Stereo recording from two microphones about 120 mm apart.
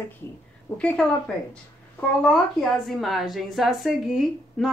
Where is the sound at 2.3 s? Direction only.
Centre (ahead or behind).